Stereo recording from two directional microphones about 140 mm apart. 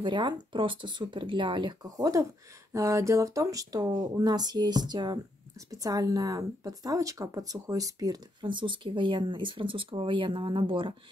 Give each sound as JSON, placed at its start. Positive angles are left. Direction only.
{"t": 0.0, "sound": "speech", "side_deg": -35}